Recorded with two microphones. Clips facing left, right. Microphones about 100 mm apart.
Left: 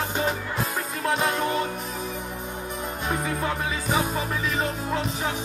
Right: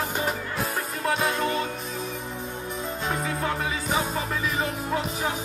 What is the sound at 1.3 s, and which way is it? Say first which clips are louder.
Music: left 1 dB; 20° left (ahead or behind).